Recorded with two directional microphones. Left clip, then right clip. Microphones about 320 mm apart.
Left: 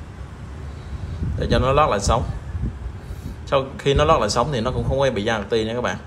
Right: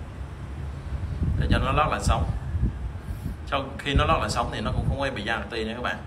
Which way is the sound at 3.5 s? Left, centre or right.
Centre.